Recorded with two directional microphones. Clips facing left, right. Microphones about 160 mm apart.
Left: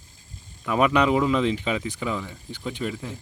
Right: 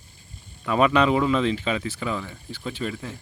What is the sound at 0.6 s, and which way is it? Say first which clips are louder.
Speech: right 1 dB; 10° left (ahead or behind).